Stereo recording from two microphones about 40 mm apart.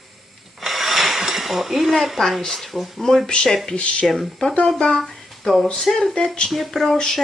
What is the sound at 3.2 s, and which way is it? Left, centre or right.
Speech, left.